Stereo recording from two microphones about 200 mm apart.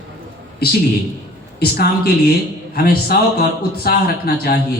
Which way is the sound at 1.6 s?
50° left (ahead or behind).